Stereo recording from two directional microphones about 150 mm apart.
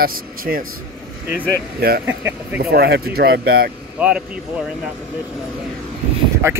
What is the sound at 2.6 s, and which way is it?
Speech, 90° right.